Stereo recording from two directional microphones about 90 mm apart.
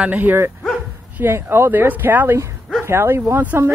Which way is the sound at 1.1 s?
20° right (ahead or behind).